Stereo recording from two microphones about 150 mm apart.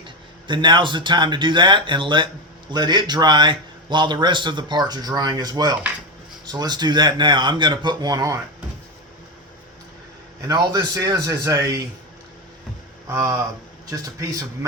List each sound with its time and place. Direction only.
0.4 s a man's voice: 30° right (ahead or behind)
10.4 s a man's voice: 25° right (ahead or behind)
13.1 s a man's voice: 20° right (ahead or behind)